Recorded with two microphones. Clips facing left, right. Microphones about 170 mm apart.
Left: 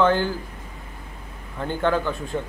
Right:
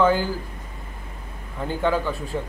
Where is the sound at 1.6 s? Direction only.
5° right (ahead or behind).